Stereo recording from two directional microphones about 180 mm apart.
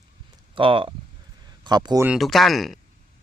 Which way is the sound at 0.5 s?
30° right (ahead or behind).